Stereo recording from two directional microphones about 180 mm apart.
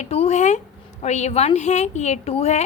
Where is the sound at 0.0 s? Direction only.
35° left (ahead or behind).